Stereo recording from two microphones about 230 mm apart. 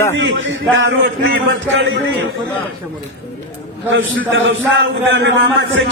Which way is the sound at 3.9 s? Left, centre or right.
Right.